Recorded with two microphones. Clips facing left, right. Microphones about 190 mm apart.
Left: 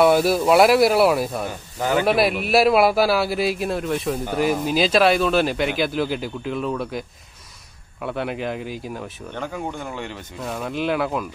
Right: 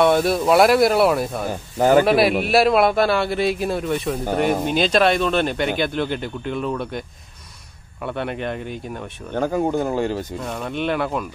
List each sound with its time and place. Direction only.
0.0 s a man's voice: 5° left (ahead or behind)
1.8 s speech: 45° right (ahead or behind)
2.0 s a man's voice: centre (ahead or behind)
9.3 s speech: 40° right (ahead or behind)
10.4 s a man's voice: centre (ahead or behind)